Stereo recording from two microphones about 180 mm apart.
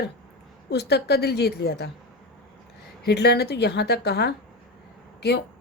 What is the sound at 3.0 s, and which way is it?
Speech, 65° left (ahead or behind).